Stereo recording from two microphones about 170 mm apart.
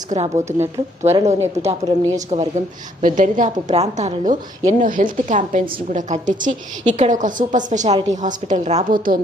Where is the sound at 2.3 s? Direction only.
40° right (ahead or behind).